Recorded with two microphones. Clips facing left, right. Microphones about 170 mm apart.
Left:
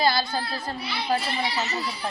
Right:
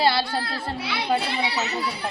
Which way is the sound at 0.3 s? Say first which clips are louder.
Right 2 dB; 70° right (ahead or behind).